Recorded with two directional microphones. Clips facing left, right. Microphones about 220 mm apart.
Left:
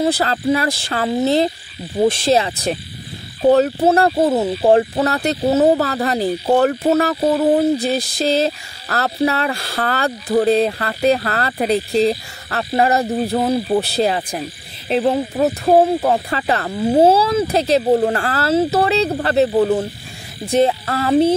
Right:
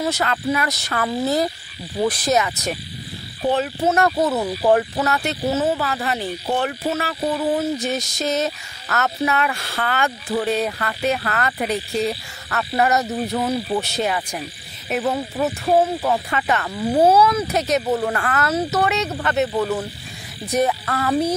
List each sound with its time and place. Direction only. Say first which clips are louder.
0.0 s speech: left 5 dB; 30° left (ahead or behind)
3.4 s frog: left 7 dB; 40° left (ahead or behind)
14.9 s speech: left 5 dB; 30° left (ahead or behind)
15.3 s frog: left 4 dB; 35° left (ahead or behind)
20.4 s speech: left 5 dB; 25° left (ahead or behind)